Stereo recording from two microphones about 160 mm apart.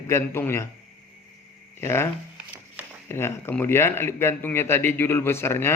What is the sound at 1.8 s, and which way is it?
Speech, 15° left (ahead or behind).